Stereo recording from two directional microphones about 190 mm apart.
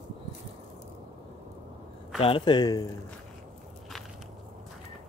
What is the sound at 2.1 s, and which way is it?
Speech, 30° left (ahead or behind).